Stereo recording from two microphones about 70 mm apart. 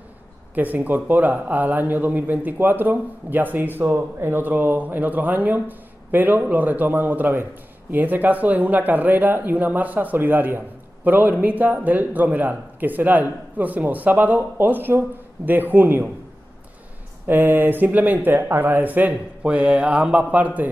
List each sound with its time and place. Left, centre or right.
0.6 s a man's voice: right
17.3 s a man's voice: right